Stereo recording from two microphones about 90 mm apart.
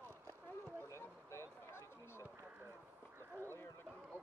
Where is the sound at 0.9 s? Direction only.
30° left (ahead or behind).